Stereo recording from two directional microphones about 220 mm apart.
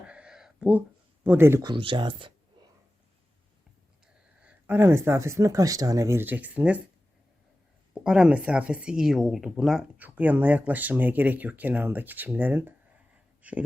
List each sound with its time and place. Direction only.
0.1 s a sound: 5° right (ahead or behind)
1.2 s speech: 10° right (ahead or behind)
4.0 s speech: 5° right (ahead or behind)
7.9 s speech: 5° right (ahead or behind)